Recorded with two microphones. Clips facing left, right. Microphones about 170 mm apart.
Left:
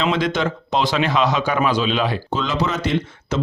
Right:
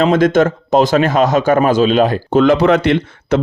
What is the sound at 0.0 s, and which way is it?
A man's voice, 45° right (ahead or behind).